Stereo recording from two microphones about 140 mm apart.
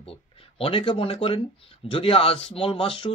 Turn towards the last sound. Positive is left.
turn(degrees=40)  # may be behind; listen again after turning